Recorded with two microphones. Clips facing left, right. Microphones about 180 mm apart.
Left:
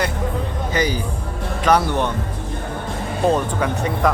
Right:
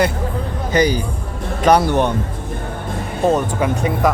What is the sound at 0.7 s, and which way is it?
Speech, 40° right (ahead or behind).